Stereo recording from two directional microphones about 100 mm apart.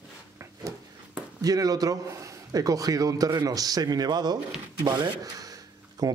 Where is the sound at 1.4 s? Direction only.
35° right (ahead or behind).